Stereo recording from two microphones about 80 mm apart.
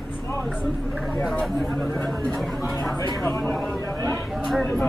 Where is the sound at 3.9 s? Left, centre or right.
Left.